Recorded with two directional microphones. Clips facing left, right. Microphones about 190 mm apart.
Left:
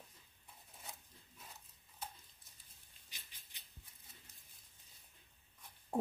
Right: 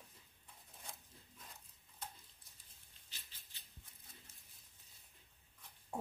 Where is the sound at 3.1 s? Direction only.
15° left (ahead or behind).